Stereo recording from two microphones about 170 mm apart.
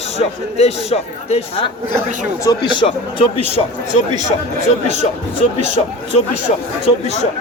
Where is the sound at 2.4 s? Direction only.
25° left (ahead or behind).